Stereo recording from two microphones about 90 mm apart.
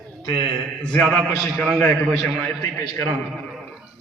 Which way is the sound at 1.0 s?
5° left (ahead or behind).